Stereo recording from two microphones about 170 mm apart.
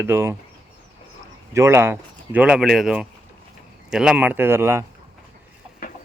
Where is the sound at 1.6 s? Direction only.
15° right (ahead or behind).